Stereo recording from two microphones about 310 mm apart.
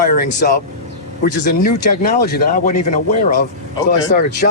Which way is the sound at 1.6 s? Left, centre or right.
Left.